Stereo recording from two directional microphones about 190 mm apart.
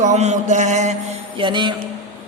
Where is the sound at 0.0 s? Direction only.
35° right (ahead or behind).